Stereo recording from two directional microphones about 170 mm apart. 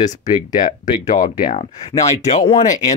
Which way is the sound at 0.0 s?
45° left (ahead or behind).